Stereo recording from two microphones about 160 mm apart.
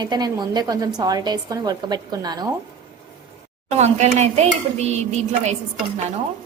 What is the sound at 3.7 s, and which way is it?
Dishes, 45° right (ahead or behind).